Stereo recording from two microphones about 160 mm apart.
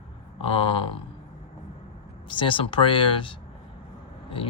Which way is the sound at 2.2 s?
30° left (ahead or behind).